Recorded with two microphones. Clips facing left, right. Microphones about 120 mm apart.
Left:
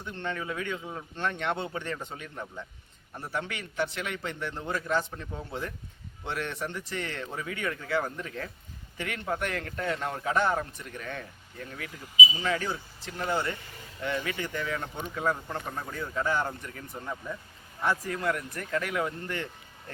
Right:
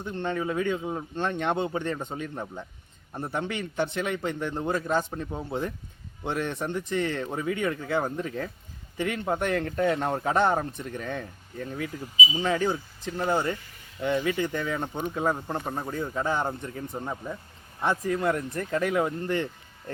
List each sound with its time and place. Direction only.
0.1 s speech: 20° right (ahead or behind)
0.4 s speech: 35° right (ahead or behind)
1.1 s speech: 20° right (ahead or behind)
2.1 s speech: 30° right (ahead or behind)
14.3 s speech: 20° right (ahead or behind)